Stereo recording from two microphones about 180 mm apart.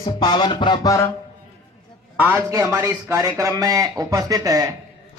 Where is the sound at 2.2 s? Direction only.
15° right (ahead or behind).